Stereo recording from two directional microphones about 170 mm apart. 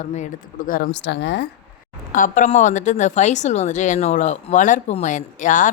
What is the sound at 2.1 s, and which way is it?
A woman's voice, 50° left (ahead or behind).